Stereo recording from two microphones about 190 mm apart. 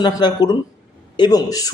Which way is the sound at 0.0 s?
20° left (ahead or behind).